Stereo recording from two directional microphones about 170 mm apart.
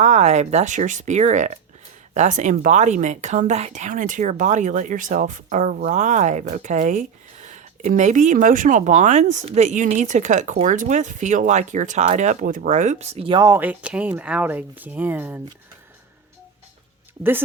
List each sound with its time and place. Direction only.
0.0 s a woman's voice: 40° right (ahead or behind)
13.4 s speech: 10° right (ahead or behind)